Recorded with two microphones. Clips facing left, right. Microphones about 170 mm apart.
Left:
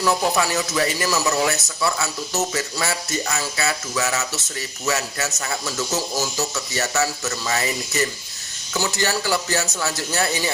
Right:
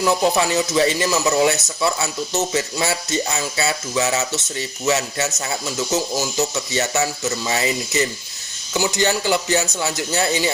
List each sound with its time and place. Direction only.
0.0 s speech: 20° right (ahead or behind)